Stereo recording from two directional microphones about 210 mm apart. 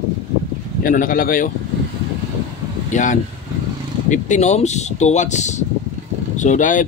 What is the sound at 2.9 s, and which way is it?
Speech, 35° left (ahead or behind).